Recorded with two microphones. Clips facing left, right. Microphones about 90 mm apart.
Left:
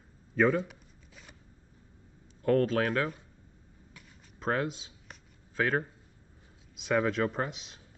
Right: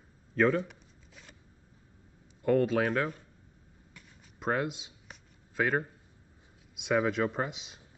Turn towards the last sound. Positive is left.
turn(degrees=-5)  # may be behind; listen again after turning